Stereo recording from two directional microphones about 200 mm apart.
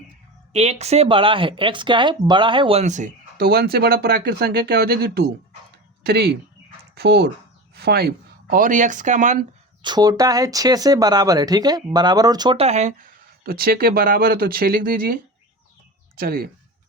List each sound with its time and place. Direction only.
0.5 s speech: 30° right (ahead or behind)
9.8 s speech: 20° right (ahead or behind); by 13.1 s 35° right (ahead or behind)
13.4 s speech: 50° right (ahead or behind)